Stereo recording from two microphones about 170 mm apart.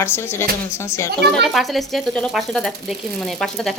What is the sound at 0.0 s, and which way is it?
Speech, 15° left (ahead or behind).